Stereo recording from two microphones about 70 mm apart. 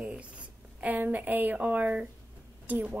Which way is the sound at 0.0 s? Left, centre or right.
Centre.